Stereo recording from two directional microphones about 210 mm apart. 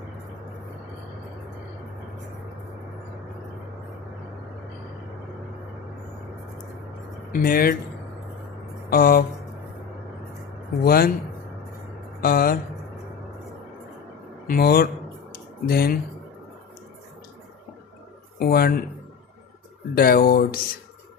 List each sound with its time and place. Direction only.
7.3 s speech: 45° left (ahead or behind)
8.9 s speech: 45° left (ahead or behind)
10.8 s speech: 45° left (ahead or behind)
12.2 s speech: 45° left (ahead or behind)
14.4 s speech: 45° left (ahead or behind)
15.3 s a sound: 45° left (ahead or behind)
18.3 s speech: 45° left (ahead or behind)
20.0 s speech: 45° left (ahead or behind)